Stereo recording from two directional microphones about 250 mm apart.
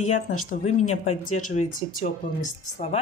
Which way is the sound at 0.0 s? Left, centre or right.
Left.